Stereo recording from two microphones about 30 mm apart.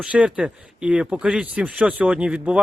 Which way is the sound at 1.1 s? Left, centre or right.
Right.